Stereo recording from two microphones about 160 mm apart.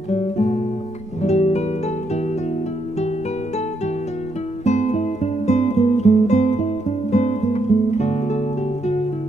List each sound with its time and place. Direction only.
0.1 s guitar: 45° left (ahead or behind)
1.2 s music: 45° left (ahead or behind)
4.6 s guitar: 45° left (ahead or behind)